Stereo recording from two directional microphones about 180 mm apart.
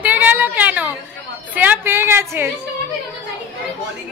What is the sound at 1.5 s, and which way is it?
Speech, 10° right (ahead or behind).